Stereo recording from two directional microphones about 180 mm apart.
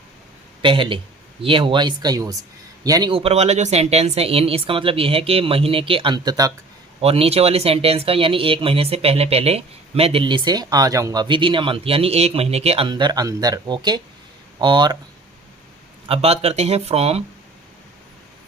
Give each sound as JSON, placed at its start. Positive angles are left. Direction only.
{"t": 0.6, "sound": "speech", "side_deg": -30}
{"t": 7.0, "sound": "speech", "side_deg": -35}
{"t": 16.0, "sound": "speech", "side_deg": -35}